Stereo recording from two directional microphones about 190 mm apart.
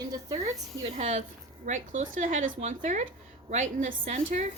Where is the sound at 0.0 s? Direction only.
20° right (ahead or behind).